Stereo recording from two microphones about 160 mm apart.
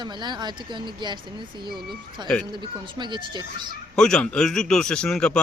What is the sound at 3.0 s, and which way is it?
Speech, 30° right (ahead or behind).